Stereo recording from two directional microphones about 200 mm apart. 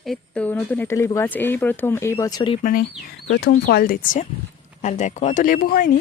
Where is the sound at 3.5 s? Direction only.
50° left (ahead or behind).